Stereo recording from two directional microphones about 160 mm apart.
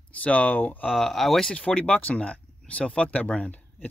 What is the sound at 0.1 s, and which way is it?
Speech, 10° left (ahead or behind).